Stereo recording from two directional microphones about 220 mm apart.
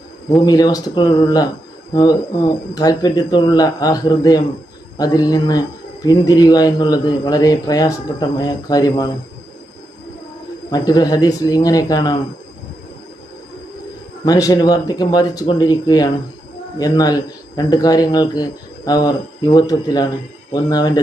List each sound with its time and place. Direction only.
0.4 s speech: 15° left (ahead or behind)
10.7 s speech: 15° left (ahead or behind)
14.3 s speech: 15° left (ahead or behind)